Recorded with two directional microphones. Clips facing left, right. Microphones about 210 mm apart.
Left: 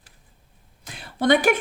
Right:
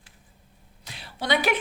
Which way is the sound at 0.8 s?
50° left (ahead or behind).